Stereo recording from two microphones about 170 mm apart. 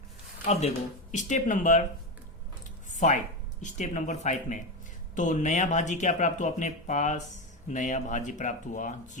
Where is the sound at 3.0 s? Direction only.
45° left (ahead or behind).